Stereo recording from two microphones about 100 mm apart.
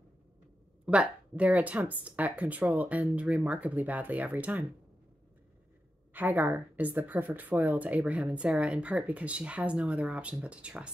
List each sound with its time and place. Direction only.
0.8 s speech: 10° right (ahead or behind)
6.1 s speech: 20° right (ahead or behind)